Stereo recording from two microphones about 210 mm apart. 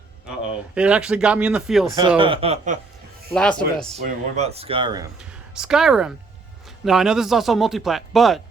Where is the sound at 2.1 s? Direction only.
25° right (ahead or behind).